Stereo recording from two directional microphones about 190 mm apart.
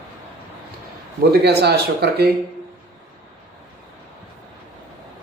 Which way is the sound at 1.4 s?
60° right (ahead or behind).